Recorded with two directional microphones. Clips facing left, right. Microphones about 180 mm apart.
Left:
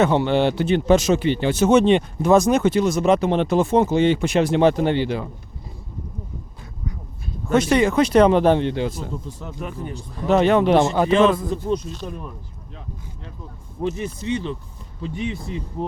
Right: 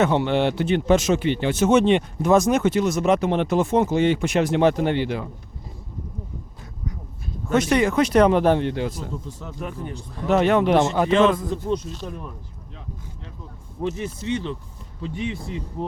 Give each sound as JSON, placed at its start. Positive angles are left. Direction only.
{"t": 0.0, "sound": "speech", "side_deg": 35}
{"t": 7.4, "sound": "speech", "side_deg": 30}
{"t": 9.8, "sound": "speech", "side_deg": 10}
{"t": 10.2, "sound": "speech", "side_deg": 30}
{"t": 14.0, "sound": "speech", "side_deg": 10}